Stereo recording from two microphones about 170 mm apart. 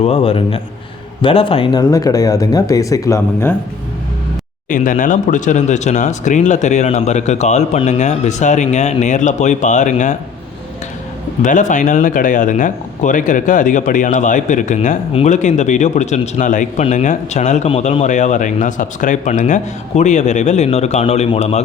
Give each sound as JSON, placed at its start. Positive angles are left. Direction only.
{"t": 0.0, "sound": "a man's voice", "side_deg": 35}
{"t": 4.7, "sound": "speech", "side_deg": 50}
{"t": 11.4, "sound": "speech", "side_deg": 50}